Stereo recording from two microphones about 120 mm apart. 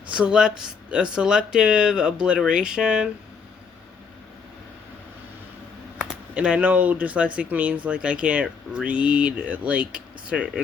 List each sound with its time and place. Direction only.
0.1 s speech: 5° right (ahead or behind)
6.0 s speech: 10° right (ahead or behind)